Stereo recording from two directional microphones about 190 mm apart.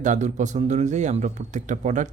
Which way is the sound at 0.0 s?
40° right (ahead or behind).